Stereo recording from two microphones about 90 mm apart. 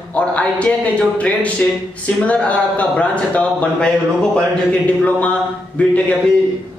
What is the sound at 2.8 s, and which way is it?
Speech, 15° left (ahead or behind).